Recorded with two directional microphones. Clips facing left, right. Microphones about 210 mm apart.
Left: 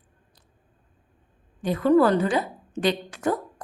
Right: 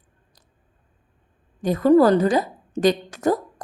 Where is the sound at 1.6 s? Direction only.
40° right (ahead or behind).